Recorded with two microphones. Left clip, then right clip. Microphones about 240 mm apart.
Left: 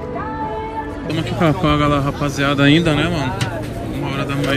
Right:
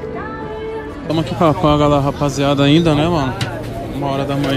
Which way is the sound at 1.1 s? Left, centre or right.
Centre.